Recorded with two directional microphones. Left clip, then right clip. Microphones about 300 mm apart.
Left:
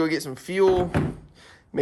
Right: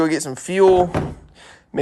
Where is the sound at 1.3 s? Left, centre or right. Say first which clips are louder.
Right 4 dB; centre.